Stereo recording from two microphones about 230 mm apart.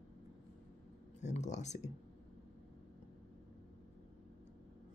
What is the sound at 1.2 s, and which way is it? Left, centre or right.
Speech, left.